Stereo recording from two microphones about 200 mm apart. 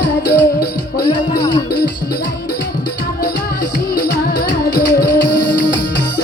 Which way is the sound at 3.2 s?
50° left (ahead or behind).